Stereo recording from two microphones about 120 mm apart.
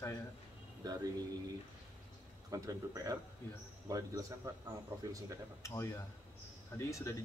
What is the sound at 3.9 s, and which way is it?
Speech, 30° right (ahead or behind).